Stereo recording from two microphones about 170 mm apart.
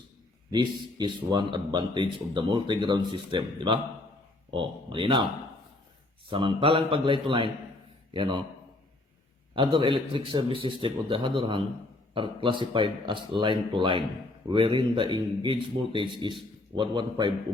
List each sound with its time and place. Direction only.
0.5 s a man's voice: 25° right (ahead or behind)
6.3 s a man's voice: 30° right (ahead or behind)
9.6 s a man's voice: 30° right (ahead or behind)